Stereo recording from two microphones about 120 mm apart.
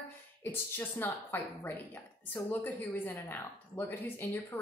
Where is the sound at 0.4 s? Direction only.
15° left (ahead or behind).